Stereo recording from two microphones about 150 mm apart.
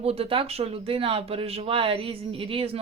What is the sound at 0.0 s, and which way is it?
Speech, 40° right (ahead or behind).